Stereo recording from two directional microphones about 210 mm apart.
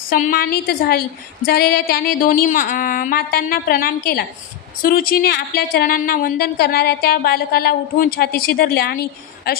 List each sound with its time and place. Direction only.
0.1 s a woman's voice: 40° left (ahead or behind)